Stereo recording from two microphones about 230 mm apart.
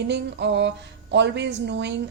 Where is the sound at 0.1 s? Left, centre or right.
Right.